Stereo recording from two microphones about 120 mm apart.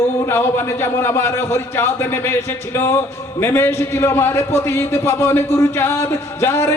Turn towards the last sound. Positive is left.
turn(degrees=20)  # may be behind; listen again after turning